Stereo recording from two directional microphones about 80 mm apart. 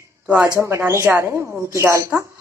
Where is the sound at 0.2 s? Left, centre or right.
Centre.